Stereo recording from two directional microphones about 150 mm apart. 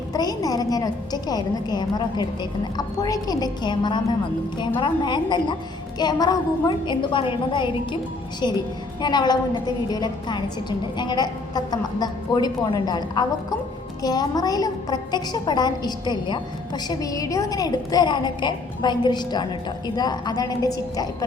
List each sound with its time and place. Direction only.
0.1 s a woman's voice: 25° left (ahead or behind)
9.0 s a woman's voice: 30° left (ahead or behind)